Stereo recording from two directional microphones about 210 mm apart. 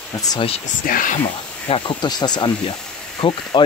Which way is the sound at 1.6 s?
25° left (ahead or behind).